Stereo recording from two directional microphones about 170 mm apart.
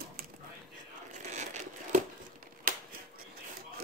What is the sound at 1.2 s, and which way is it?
Crumpling, 45° right (ahead or behind).